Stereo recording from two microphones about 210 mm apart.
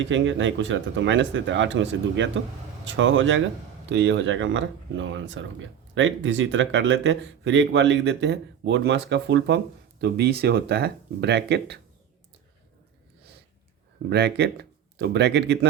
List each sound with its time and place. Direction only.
0.0 s speech: 60° right (ahead or behind)
14.1 s speech: 50° right (ahead or behind)